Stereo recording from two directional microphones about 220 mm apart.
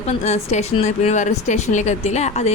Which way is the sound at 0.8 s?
30° left (ahead or behind).